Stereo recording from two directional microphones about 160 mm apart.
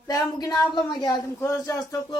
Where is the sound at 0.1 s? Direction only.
25° left (ahead or behind).